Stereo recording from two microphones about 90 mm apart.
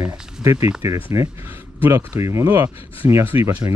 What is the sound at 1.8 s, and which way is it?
Speech, 30° right (ahead or behind).